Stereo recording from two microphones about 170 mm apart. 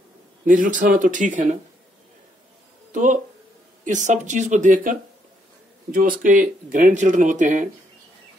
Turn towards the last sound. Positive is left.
turn(degrees=-45)  # may be behind; listen again after turning